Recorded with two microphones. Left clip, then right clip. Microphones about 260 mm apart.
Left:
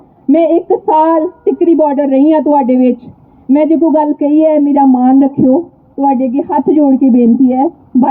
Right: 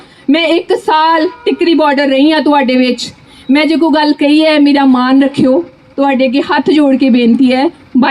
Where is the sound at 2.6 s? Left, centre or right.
Left.